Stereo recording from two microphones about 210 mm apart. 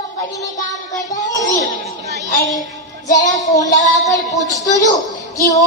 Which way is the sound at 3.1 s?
35° left (ahead or behind).